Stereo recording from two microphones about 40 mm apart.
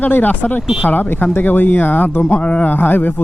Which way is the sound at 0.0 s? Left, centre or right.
Left.